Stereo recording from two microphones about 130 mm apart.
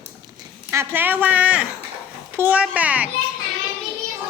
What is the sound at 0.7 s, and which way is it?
A woman's voice, 15° right (ahead or behind).